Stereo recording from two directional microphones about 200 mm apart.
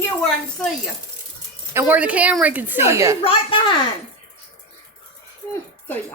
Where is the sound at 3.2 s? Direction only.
25° left (ahead or behind).